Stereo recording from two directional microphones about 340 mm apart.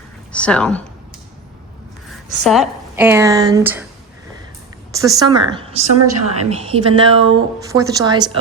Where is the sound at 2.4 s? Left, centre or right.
Centre.